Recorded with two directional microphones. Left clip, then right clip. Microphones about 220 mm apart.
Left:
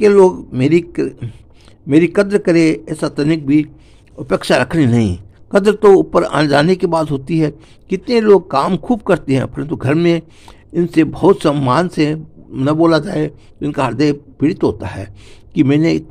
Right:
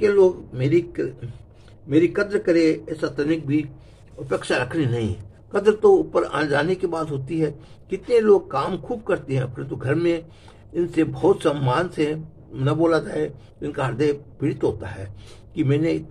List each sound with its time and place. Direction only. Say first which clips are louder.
0.0 s a man's voice: left 8 dB; 50° left (ahead or behind)